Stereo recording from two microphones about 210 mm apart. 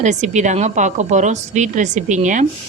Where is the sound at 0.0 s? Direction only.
35° right (ahead or behind).